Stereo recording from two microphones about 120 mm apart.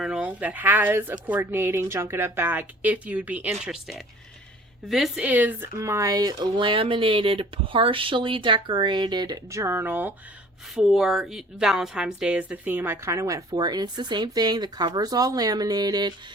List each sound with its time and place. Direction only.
0.0 s a woman's voice: 10° right (ahead or behind)
10.8 s a woman's voice: centre (ahead or behind); by 16.1 s 35° right (ahead or behind)